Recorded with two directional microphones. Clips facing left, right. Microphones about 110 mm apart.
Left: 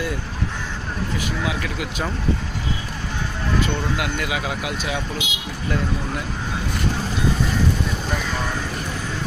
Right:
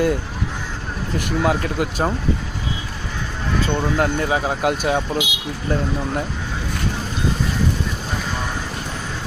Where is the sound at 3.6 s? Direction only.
35° right (ahead or behind).